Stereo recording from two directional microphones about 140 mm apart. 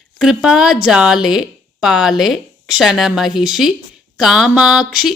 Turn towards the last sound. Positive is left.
turn(degrees=-5)  # may be behind; listen again after turning